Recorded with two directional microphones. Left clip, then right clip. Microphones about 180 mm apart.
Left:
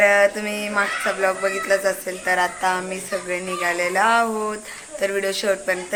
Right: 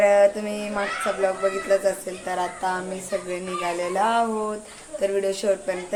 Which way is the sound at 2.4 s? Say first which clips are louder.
Left 2 dB; 30° left (ahead or behind).